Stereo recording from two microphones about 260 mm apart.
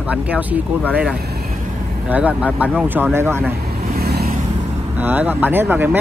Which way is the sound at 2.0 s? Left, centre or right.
Centre.